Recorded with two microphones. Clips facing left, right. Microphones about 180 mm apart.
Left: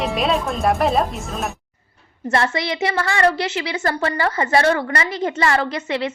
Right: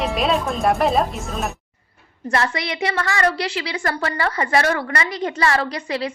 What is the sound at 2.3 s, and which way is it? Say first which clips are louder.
A woman's voice: left 2 dB; 30° left (ahead or behind).